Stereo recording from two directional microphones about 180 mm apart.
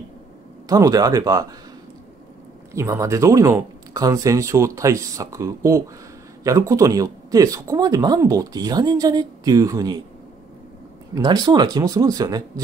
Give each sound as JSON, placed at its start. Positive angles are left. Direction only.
{"t": 0.7, "sound": "speech", "side_deg": -20}
{"t": 2.7, "sound": "speech", "side_deg": -15}
{"t": 11.1, "sound": "speech", "side_deg": -20}